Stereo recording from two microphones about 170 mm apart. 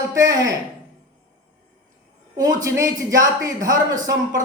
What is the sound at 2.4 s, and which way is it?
Speech, 20° right (ahead or behind).